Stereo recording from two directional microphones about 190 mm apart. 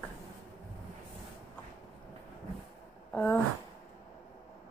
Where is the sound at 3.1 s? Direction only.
10° left (ahead or behind).